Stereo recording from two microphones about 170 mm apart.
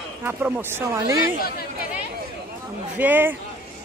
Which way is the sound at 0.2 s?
10° right (ahead or behind).